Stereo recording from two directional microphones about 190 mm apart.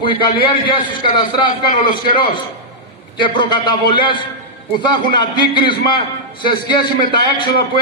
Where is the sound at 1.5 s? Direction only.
45° left (ahead or behind).